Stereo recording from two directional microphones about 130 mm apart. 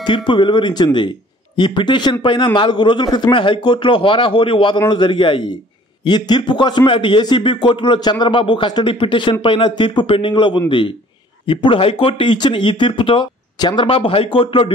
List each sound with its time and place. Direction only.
0.0 s a man's voice: 40° left (ahead or behind)